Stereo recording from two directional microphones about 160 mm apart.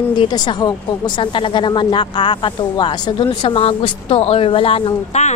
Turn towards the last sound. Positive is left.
turn(degrees=45)  # may be behind; listen again after turning